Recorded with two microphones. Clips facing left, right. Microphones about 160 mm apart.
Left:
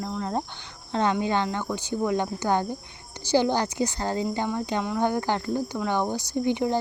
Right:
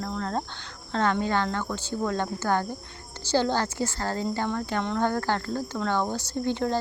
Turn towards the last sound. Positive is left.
turn(degrees=15)  # may be behind; listen again after turning